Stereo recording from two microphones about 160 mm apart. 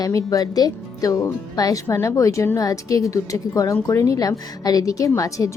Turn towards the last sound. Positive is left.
turn(degrees=20)  # may be behind; listen again after turning